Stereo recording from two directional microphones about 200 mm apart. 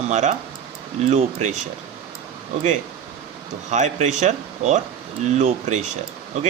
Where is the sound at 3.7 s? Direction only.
35° right (ahead or behind).